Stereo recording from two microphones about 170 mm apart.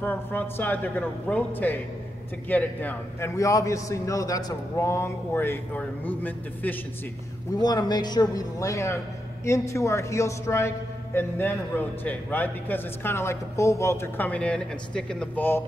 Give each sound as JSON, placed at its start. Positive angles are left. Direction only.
{"t": 0.0, "sound": "a man's voice", "side_deg": 10}
{"t": 7.5, "sound": "a man's voice", "side_deg": 25}